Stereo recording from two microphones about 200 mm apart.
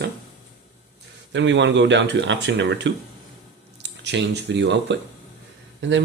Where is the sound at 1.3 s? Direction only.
65° right (ahead or behind).